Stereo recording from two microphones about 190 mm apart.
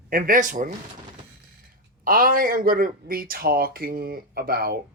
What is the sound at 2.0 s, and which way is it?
Speech, 50° right (ahead or behind).